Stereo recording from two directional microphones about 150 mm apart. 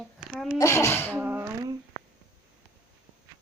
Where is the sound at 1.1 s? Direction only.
10° right (ahead or behind).